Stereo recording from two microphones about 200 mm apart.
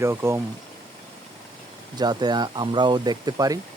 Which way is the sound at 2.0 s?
20° right (ahead or behind).